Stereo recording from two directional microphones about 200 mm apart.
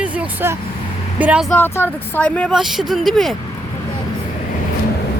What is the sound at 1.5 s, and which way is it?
Speech, 10° left (ahead or behind).